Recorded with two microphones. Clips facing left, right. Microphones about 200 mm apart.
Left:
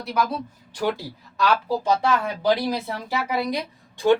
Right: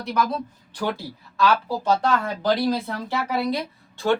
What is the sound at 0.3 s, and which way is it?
Speech, 10° left (ahead or behind).